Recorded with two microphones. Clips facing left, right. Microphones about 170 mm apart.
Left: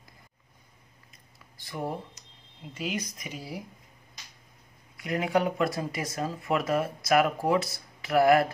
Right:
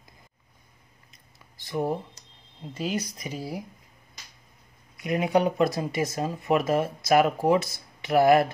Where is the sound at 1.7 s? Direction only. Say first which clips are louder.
Right 6 dB; 20° right (ahead or behind).